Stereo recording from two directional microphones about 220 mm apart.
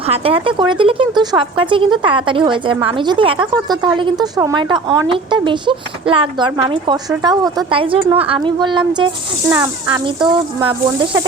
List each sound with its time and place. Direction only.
0.1 s speech: 25° right (ahead or behind)